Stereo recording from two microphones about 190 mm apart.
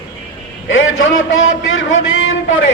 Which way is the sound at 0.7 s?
90° left.